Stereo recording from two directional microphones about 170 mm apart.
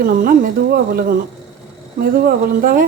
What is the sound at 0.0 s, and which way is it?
Speech, 55° right (ahead or behind).